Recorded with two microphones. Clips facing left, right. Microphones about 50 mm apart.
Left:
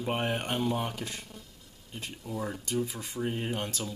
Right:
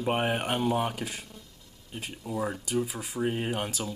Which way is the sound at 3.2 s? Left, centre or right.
Centre.